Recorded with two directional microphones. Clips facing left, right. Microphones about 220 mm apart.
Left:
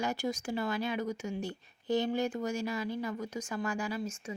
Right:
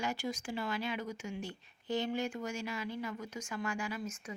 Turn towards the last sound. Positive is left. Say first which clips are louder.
# left 4 dB
turn(degrees=30)  # may be behind; listen again after turning